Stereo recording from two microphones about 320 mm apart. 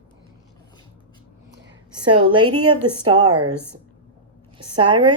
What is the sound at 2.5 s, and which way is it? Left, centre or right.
Speech, right.